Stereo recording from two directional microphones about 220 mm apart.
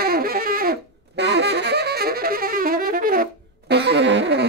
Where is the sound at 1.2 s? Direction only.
50° right (ahead or behind).